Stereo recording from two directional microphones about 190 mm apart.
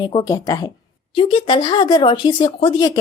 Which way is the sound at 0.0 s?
25° left (ahead or behind).